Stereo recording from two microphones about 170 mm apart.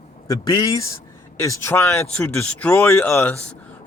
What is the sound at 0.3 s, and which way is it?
A man's voice, 20° left (ahead or behind).